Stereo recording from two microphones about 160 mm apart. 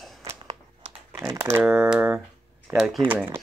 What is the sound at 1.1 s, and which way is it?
Speech, 20° right (ahead or behind).